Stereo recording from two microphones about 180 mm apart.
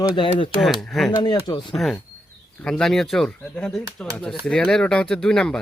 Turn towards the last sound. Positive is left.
turn(degrees=5)  # may be behind; listen again after turning